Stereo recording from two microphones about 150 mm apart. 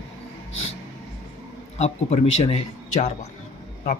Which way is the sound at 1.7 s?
50° left (ahead or behind).